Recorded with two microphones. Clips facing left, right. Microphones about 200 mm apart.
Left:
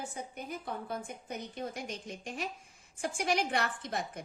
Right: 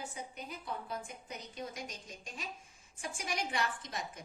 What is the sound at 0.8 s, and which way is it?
A woman's voice, 55° left (ahead or behind).